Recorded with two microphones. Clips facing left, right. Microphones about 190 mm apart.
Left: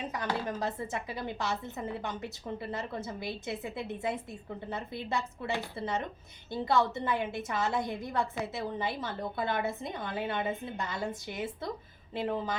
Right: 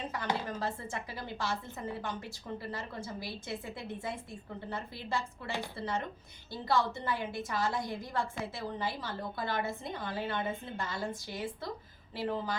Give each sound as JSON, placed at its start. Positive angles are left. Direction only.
{"t": 0.4, "sound": "a woman's voice", "side_deg": 20}